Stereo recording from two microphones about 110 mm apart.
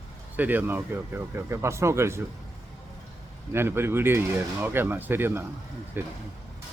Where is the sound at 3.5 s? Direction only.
20° right (ahead or behind).